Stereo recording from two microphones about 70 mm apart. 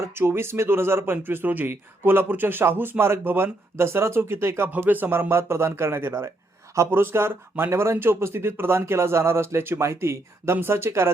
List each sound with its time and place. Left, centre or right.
0.2 s speech: right
4.7 s speech: right
5.3 s speech: right